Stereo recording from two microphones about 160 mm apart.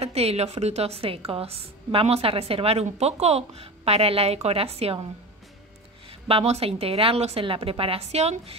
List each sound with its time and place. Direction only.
0.0 s a woman's voice: 40° right (ahead or behind)
6.2 s a woman's voice: 40° right (ahead or behind)